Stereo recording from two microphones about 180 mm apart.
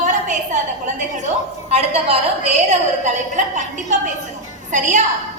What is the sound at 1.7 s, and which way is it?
A woman's voice, 35° right (ahead or behind).